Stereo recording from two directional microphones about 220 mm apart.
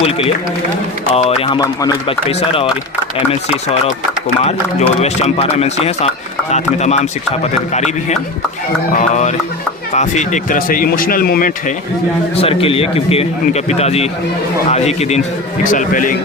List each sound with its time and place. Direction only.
0.0 s speech: 25° left (ahead or behind)
4.4 s a man's voice: 30° left (ahead or behind)
12.4 s a man's voice: 25° left (ahead or behind)